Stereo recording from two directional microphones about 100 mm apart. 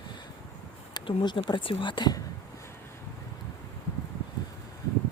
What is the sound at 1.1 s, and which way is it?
A woman's voice, 55° left (ahead or behind).